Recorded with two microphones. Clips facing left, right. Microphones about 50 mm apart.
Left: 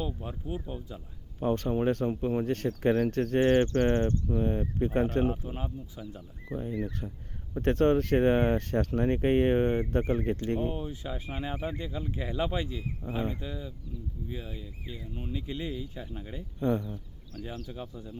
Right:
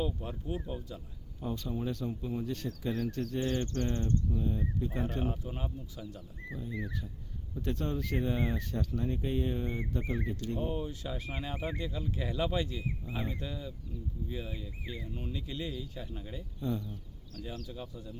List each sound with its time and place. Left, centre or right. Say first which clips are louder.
0.0 s speech: even; centre
1.4 s speech: left 9 dB; left
3.8 s speech: left 7 dB; left
5.5 s speech: left 3 dB; centre
6.5 s speech: left 6 dB; left
10.8 s speech: left 1 dB; centre
16.6 s speech: left 7 dB; left
16.8 s speech: left 4 dB; left